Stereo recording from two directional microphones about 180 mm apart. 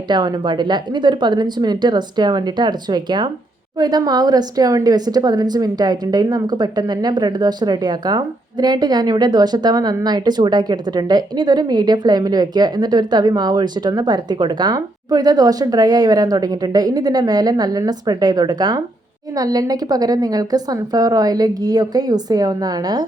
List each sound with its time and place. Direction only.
0.1 s a woman's voice: 25° right (ahead or behind)